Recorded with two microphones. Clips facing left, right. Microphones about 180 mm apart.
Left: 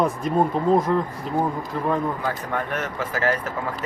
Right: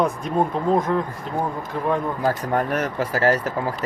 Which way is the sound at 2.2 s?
40° right (ahead or behind).